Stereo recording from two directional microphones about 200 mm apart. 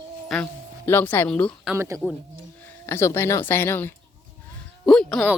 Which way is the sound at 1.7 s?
15° right (ahead or behind).